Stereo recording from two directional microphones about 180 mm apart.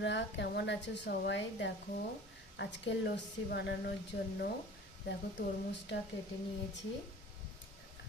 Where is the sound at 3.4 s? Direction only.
70° left (ahead or behind).